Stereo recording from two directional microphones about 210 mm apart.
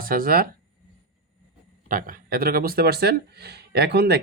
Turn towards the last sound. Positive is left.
turn(degrees=-50)  # may be behind; listen again after turning